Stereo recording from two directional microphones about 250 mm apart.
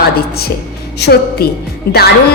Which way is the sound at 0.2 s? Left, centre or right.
Left.